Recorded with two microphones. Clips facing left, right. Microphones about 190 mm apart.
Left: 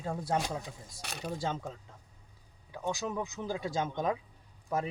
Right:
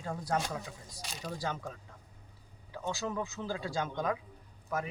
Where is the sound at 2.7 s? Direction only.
15° left (ahead or behind).